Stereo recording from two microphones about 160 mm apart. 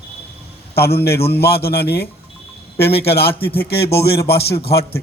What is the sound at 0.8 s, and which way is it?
A man's voice, 80° left.